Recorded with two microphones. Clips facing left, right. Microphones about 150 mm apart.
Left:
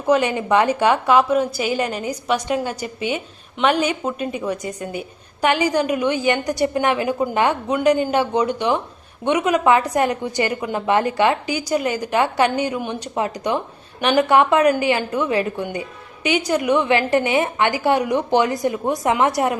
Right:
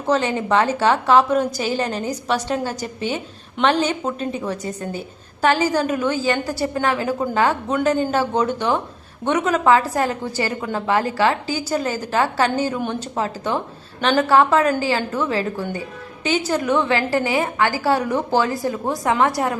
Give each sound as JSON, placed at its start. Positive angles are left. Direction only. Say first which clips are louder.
{"t": 0.1, "sound": "a woman's voice", "louder": "left 2 dB", "side_deg": 15}